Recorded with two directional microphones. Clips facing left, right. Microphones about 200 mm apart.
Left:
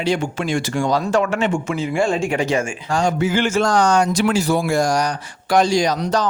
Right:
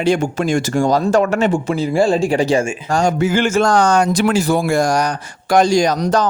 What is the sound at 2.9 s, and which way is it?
Speech, 45° right (ahead or behind).